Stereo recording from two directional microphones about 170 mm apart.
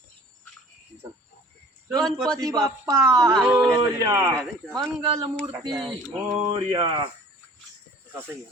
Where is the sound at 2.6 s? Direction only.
20° right (ahead or behind).